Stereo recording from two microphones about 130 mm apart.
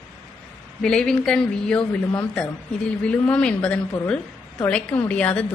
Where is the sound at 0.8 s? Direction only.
5° left (ahead or behind).